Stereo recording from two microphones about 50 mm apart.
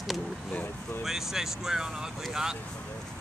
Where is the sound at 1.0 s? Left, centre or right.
Centre.